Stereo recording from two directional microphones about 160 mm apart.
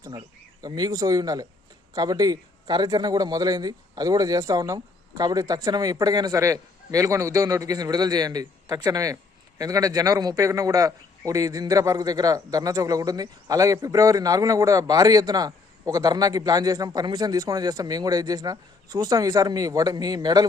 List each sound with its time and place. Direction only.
0.0 s a man's voice: 25° right (ahead or behind)